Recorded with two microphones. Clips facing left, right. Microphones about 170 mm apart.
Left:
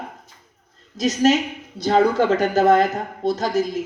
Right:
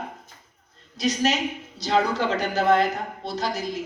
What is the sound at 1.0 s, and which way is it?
A woman's voice, 45° left (ahead or behind).